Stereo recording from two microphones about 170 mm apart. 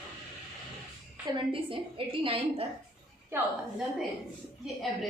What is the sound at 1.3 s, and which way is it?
A woman's voice, 30° right (ahead or behind).